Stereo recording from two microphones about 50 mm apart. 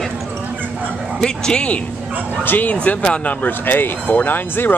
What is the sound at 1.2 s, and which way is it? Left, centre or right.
Speech, centre.